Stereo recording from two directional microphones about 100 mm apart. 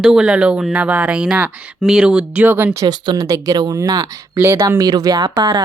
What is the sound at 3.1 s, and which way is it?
Speech, 35° right (ahead or behind).